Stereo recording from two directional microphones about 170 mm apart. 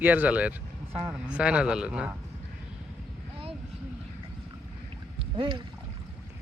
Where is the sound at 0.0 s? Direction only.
10° right (ahead or behind).